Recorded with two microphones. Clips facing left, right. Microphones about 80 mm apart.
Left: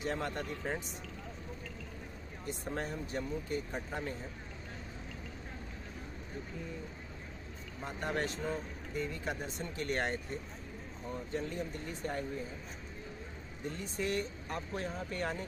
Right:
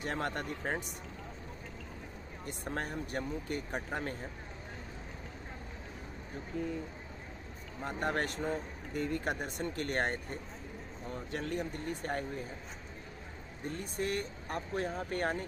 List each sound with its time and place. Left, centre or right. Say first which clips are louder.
0.0 s speech: right 1 dB; right
2.4 s speech: even; right
7.8 s speech: right 2 dB; right
11.3 s speech: right 2 dB; right
13.7 s speech: right 1 dB; right